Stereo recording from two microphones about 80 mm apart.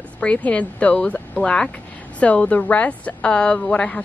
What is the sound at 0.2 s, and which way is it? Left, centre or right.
A woman's voice, centre.